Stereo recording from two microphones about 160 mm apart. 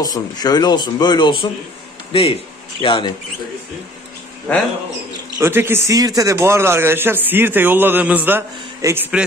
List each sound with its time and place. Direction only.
0.0 s speech: 25° left (ahead or behind)
5.4 s speech: 15° right (ahead or behind)